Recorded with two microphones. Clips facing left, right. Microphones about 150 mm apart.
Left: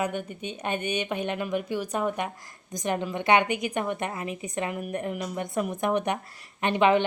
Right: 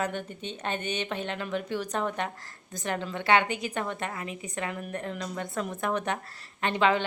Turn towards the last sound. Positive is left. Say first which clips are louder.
# left 4 dB
turn(degrees=20)  # may be behind; listen again after turning